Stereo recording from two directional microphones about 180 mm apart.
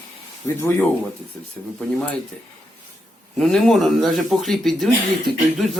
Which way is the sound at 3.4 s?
5° left (ahead or behind).